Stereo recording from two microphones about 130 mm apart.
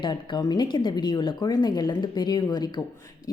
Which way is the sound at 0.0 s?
35° left (ahead or behind).